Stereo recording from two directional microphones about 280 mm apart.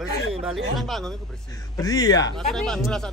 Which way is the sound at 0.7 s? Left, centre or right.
Centre.